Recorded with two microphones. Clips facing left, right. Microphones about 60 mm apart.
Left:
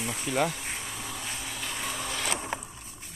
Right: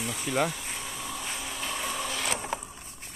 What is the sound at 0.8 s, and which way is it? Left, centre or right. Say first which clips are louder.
Bee: right 1 dB; centre.